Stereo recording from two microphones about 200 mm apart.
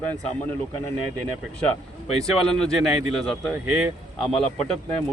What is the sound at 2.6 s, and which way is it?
Speech, centre (ahead or behind).